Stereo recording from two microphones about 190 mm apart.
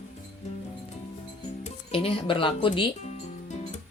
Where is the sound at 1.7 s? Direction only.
30° left (ahead or behind).